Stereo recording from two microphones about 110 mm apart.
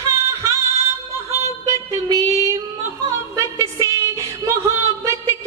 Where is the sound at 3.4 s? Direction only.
25° right (ahead or behind).